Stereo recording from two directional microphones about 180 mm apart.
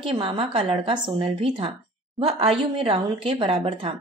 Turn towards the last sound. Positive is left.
turn(degrees=-30)  # may be behind; listen again after turning